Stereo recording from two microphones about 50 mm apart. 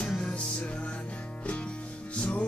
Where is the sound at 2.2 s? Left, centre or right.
Left.